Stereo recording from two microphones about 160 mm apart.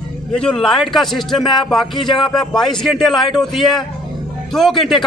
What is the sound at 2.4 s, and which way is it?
Speech, centre (ahead or behind).